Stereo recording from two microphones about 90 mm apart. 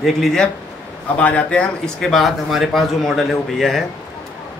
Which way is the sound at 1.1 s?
15° left (ahead or behind).